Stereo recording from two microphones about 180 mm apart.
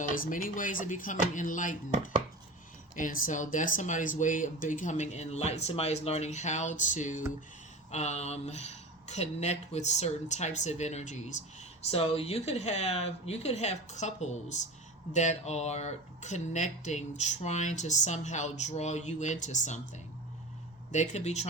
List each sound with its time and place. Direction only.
0.1 s speech: 50° left (ahead or behind)
2.9 s speech: 45° left (ahead or behind)
20.9 s speech: 40° left (ahead or behind)